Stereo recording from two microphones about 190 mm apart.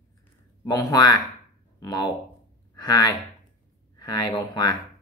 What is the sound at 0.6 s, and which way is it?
Speech, 20° left (ahead or behind).